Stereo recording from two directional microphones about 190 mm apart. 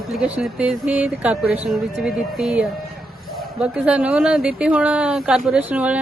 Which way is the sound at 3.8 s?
5° right (ahead or behind).